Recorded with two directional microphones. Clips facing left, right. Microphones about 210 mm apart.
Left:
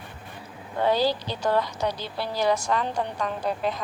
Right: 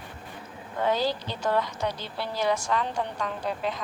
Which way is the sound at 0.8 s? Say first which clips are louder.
Left 3 dB; 35° left (ahead or behind).